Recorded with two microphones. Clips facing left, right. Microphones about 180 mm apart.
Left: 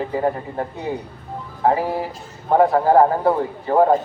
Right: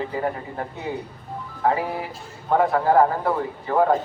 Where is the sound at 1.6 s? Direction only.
35° left (ahead or behind).